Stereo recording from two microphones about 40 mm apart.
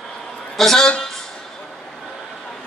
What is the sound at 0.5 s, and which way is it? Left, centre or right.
Speech, centre.